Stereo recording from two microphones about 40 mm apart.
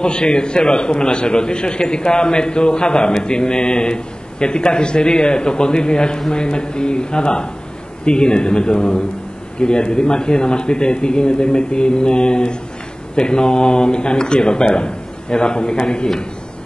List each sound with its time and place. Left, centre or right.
0.0 s a man's voice: left